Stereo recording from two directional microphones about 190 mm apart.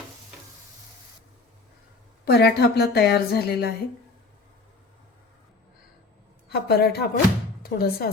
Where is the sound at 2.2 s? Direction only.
55° left (ahead or behind).